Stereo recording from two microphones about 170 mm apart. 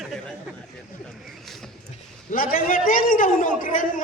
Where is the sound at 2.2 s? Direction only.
55° left (ahead or behind).